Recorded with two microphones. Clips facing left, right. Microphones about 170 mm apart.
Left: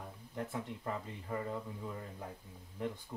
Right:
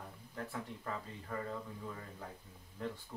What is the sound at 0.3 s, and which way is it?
Speech, 20° left (ahead or behind).